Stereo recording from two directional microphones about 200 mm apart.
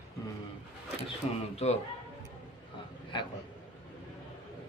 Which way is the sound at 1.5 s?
30° left (ahead or behind).